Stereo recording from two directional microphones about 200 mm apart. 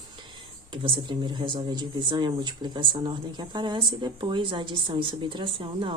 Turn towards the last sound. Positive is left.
turn(degrees=-25)  # may be behind; listen again after turning